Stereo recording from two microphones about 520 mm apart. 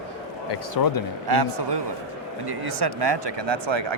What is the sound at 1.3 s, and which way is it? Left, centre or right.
Speech, right.